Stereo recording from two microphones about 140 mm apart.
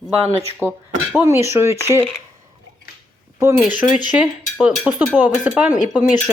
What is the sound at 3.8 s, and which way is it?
Speech, 65° left (ahead or behind).